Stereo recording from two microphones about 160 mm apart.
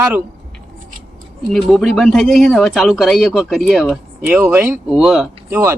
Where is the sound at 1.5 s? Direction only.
Centre (ahead or behind).